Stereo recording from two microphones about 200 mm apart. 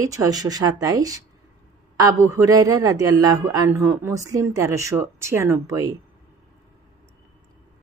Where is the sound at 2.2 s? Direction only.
15° right (ahead or behind).